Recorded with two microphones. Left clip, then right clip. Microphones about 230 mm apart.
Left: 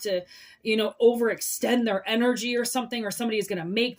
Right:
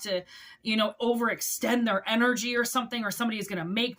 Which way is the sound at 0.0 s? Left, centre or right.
Centre.